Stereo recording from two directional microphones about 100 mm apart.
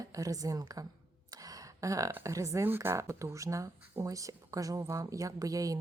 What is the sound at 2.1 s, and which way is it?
Speech, 30° right (ahead or behind).